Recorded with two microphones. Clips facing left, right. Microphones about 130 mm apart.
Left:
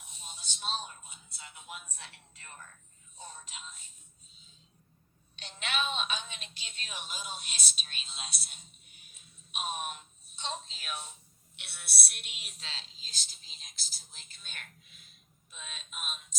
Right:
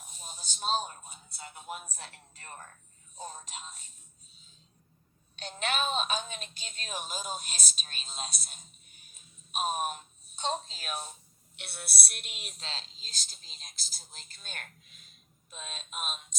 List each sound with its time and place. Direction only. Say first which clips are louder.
0.0 s speech: right 3 dB; 40° right (ahead or behind)
5.4 s a woman's voice: right 3 dB; 45° right (ahead or behind)